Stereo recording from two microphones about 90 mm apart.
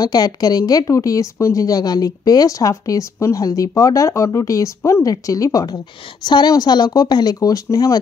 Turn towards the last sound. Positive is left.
turn(degrees=40)  # may be behind; listen again after turning